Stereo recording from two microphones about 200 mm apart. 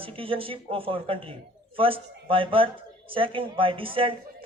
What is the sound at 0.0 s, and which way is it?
A man's voice, 25° right (ahead or behind).